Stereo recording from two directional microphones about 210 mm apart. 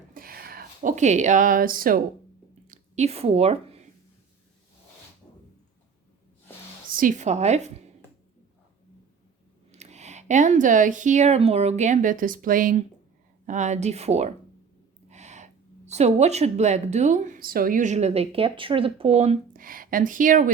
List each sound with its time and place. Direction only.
0.1 s a sound: 45° right (ahead or behind)
2.6 s a woman's voice: 30° right (ahead or behind)
6.9 s speech: 40° right (ahead or behind)
9.7 s speech: 30° right (ahead or behind)
15.1 s owl: 35° right (ahead or behind)
15.9 s speech: 30° right (ahead or behind)